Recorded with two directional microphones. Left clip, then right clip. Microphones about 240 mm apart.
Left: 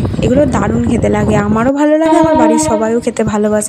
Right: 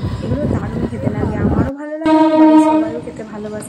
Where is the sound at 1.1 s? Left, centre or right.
Left.